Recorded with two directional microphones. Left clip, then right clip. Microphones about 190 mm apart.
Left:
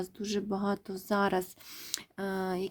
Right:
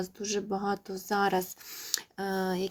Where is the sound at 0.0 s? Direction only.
35° left (ahead or behind).